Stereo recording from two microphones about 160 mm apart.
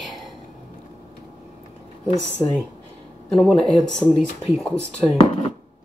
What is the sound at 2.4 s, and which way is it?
Speech, 25° left (ahead or behind).